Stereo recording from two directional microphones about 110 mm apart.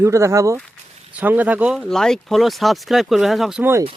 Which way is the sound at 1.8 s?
5° left (ahead or behind).